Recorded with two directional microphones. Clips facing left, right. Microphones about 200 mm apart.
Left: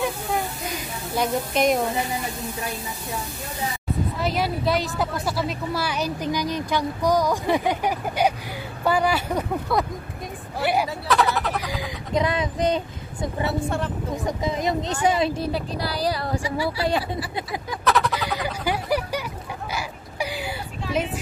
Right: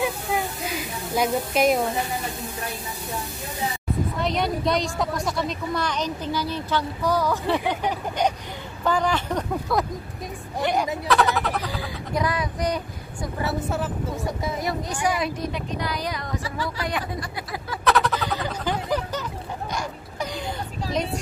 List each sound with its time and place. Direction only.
0.0 s a sound: centre (ahead or behind)
1.1 s speech: 5° right (ahead or behind)
4.2 s speech: 5° left (ahead or behind)
11.6 s speech: 15° left (ahead or behind)
13.7 s speech: 5° right (ahead or behind)
14.1 s a woman's voice: 20° left (ahead or behind)
16.4 s speech: 10° left (ahead or behind)
16.8 s a woman's voice: 30° left (ahead or behind)
17.2 s speech: 5° left (ahead or behind)
18.3 s a sound: 10° left (ahead or behind)
20.9 s speech: 5° left (ahead or behind)